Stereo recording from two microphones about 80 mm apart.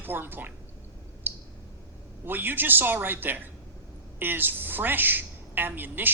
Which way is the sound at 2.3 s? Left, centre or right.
Right.